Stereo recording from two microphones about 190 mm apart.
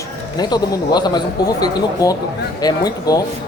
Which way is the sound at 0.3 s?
20° left (ahead or behind).